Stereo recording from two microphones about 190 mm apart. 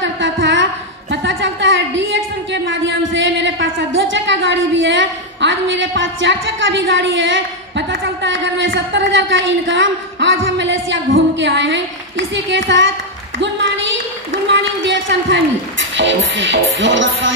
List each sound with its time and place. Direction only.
0.0 s music: 75° right (ahead or behind)
1.1 s a sound: 75° right (ahead or behind)
16.0 s music: 70° right (ahead or behind)